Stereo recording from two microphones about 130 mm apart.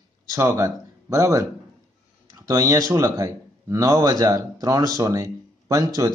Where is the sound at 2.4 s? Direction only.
25° right (ahead or behind).